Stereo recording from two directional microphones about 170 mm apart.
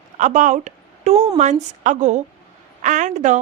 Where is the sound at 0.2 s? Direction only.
45° right (ahead or behind).